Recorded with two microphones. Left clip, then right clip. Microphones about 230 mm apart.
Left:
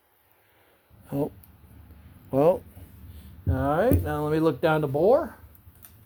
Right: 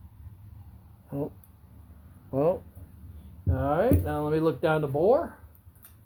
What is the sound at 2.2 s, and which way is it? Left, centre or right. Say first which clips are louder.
Speech: left 5 dB; left.